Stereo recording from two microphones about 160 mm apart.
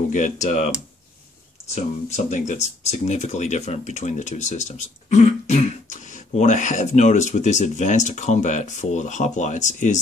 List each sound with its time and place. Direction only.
0.1 s speech: 50° left (ahead or behind)
1.8 s speech: 45° left (ahead or behind)